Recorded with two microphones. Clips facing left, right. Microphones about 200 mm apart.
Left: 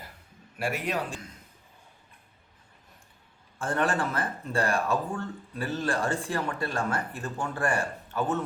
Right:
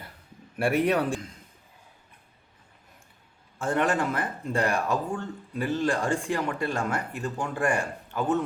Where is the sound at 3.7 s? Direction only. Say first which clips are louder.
Right 3 dB; 15° right (ahead or behind).